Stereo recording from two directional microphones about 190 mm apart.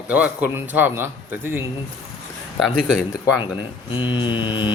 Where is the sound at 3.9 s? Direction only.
25° left (ahead or behind).